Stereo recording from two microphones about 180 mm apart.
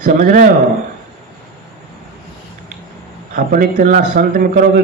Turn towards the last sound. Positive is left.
turn(degrees=-55)  # may be behind; listen again after turning